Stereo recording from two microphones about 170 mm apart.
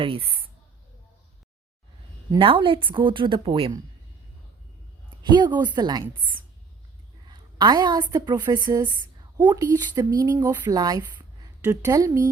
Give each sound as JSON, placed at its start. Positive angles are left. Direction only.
{"t": 0.0, "sound": "speech", "side_deg": -30}
{"t": 2.4, "sound": "speech", "side_deg": -30}
{"t": 5.3, "sound": "speech", "side_deg": -25}
{"t": 7.3, "sound": "a woman's voice", "side_deg": -25}
{"t": 9.4, "sound": "speech", "side_deg": -10}
{"t": 9.7, "sound": "speech", "side_deg": -25}